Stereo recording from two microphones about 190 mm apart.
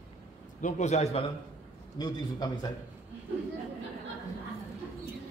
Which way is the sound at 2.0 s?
20° left (ahead or behind).